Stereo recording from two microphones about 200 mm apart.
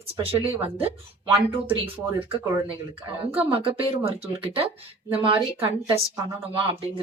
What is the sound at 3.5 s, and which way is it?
Speech, 25° right (ahead or behind).